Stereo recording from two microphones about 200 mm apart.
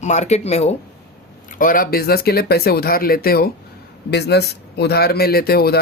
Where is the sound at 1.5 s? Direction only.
45° left (ahead or behind).